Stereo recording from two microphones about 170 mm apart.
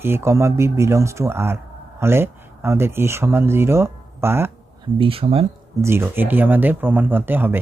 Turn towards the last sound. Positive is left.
turn(degrees=-10)  # may be behind; listen again after turning